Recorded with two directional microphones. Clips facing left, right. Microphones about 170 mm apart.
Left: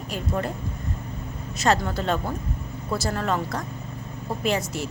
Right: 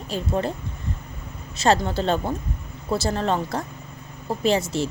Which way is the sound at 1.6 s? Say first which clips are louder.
Right 3 dB; 30° right (ahead or behind).